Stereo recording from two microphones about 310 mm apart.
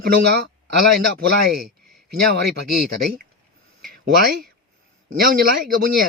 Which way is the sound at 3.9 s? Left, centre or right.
Right.